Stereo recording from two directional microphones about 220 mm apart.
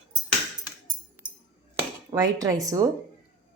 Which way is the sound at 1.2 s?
10° right (ahead or behind).